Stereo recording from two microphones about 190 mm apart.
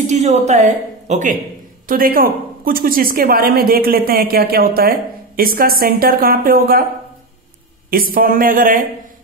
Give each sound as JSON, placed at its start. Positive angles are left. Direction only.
{"t": 0.0, "sound": "a woman's voice", "side_deg": -35}
{"t": 7.9, "sound": "a woman's voice", "side_deg": -50}